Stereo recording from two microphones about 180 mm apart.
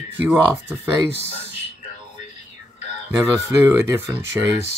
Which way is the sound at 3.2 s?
15° right (ahead or behind).